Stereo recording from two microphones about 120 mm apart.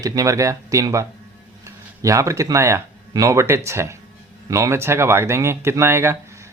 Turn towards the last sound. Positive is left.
turn(degrees=-20)  # may be behind; listen again after turning